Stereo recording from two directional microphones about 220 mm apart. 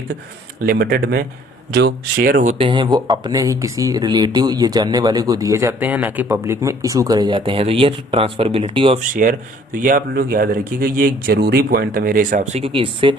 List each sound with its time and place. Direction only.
0.6 s speech: 45° right (ahead or behind); by 9.0 s 25° right (ahead or behind)
9.7 s speech: 40° right (ahead or behind); by 13.1 s 20° right (ahead or behind)